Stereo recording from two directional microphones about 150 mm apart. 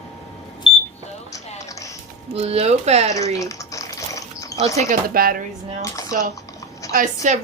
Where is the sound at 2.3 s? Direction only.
40° right (ahead or behind).